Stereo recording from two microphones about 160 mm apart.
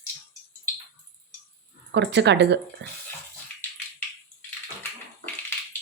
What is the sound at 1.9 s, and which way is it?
Speech, 90° right.